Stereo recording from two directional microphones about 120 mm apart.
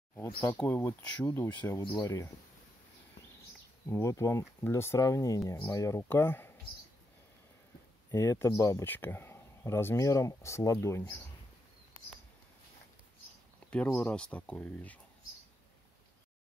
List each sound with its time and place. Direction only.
0.1 s speech: 20° left (ahead or behind)
1.9 s speech: 35° left (ahead or behind)
3.9 s speech: 25° left (ahead or behind)
8.1 s speech: 25° left (ahead or behind)
13.7 s speech: 10° left (ahead or behind)